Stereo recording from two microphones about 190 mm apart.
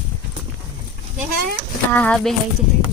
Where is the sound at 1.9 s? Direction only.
5° left (ahead or behind).